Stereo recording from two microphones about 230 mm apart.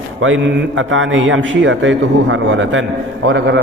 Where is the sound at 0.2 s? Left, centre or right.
Right.